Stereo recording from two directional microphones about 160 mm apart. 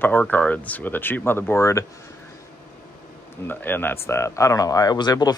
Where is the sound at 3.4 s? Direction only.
10° left (ahead or behind).